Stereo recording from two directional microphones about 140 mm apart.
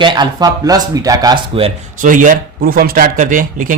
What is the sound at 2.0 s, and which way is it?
Speech, 70° right (ahead or behind).